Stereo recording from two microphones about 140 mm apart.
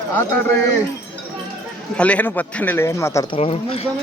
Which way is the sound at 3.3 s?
45° left (ahead or behind).